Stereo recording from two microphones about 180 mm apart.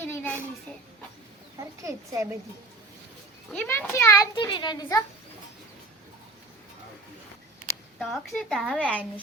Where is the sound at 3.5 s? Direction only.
10° left (ahead or behind).